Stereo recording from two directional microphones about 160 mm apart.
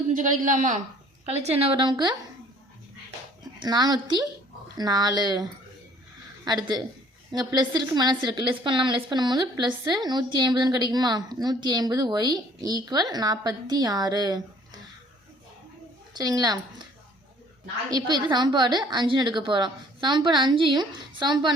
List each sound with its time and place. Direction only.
0.2 s a man's voice: 55° right (ahead or behind)
1.2 s a woman's voice: 45° right (ahead or behind)
3.6 s a woman's voice: 25° right (ahead or behind)
16.1 s a woman's voice: 25° right (ahead or behind)
17.9 s a woman's voice: 25° right (ahead or behind)